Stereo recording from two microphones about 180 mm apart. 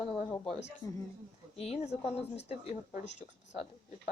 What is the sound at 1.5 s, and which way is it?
A woman's voice, 35° left (ahead or behind).